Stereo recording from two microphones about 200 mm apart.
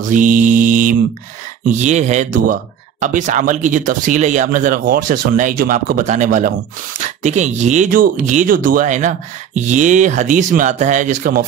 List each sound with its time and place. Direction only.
0.1 s speech: 40° right (ahead or behind)